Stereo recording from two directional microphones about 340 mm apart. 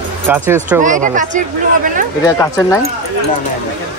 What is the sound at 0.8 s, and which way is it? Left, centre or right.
Speech, right.